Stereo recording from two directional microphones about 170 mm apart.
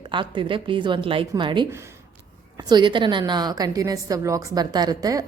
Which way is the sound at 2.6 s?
25° right (ahead or behind).